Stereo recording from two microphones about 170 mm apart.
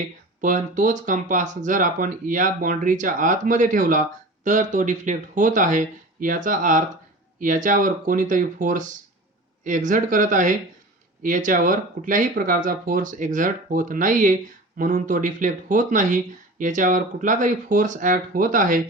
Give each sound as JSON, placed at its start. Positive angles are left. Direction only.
{"t": 0.4, "sound": "speech", "side_deg": -50}